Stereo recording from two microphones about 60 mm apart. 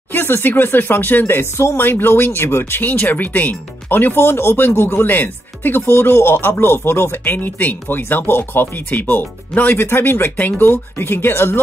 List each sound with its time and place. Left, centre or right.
0.1 s speech: left
2.8 s speech: left
7.3 s speech: left
9.8 s speech: left